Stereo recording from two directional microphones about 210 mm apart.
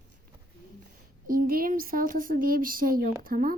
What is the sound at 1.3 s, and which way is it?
A woman's voice, 45° right (ahead or behind).